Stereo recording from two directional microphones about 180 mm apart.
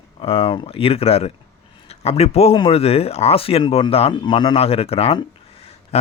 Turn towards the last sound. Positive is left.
turn(degrees=35)  # may be behind; listen again after turning